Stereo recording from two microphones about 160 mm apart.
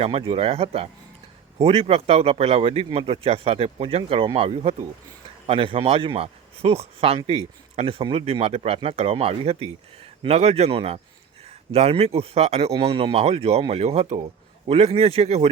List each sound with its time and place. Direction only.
0.0 s speech: 35° right (ahead or behind)